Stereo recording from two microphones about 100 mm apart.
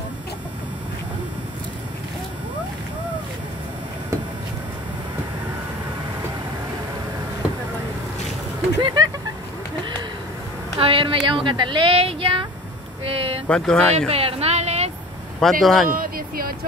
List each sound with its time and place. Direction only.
8.8 s speech: 45° right (ahead or behind)
10.8 s a woman's voice: 65° right (ahead or behind)
13.0 s a sound: 70° right (ahead or behind)
13.5 s speech: 10° left (ahead or behind)
13.9 s a sound: 90° right
15.4 s speech: 5° left (ahead or behind)